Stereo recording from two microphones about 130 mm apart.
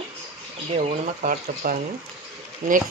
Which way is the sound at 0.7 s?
75° right (ahead or behind).